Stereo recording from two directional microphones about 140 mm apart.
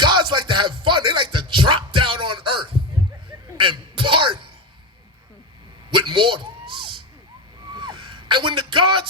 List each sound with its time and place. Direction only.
0.0 s music: 35° right (ahead or behind)
3.6 s throat clearing: 35° right (ahead or behind)
5.9 s a sound: 35° right (ahead or behind)
7.7 s vehicle: 35° right (ahead or behind)